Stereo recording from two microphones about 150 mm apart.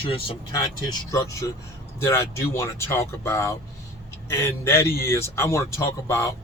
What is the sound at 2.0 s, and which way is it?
Speech, 15° left (ahead or behind).